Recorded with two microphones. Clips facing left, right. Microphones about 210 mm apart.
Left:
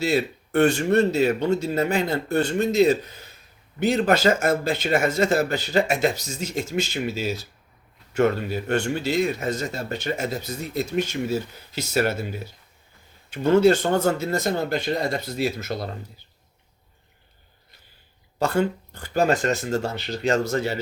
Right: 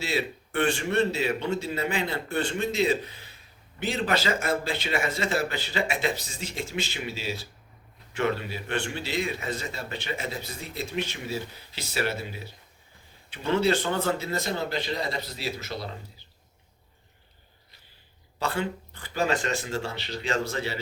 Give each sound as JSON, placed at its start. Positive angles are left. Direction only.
{"t": 0.0, "sound": "speech", "side_deg": 45}
{"t": 18.3, "sound": "speech", "side_deg": 45}